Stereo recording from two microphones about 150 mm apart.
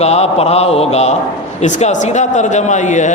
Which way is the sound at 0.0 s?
45° left (ahead or behind).